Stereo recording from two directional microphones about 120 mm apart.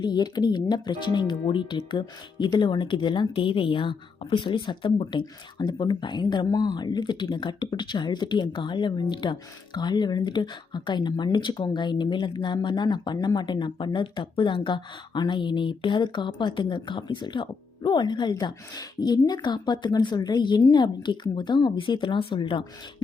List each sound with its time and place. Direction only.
0.0 s speech: 35° left (ahead or behind)